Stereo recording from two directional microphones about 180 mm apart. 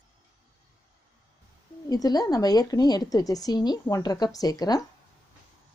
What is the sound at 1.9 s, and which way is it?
A woman's voice, 20° left (ahead or behind).